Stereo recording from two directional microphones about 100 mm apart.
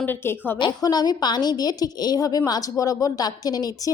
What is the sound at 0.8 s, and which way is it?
A woman's voice, 40° left (ahead or behind).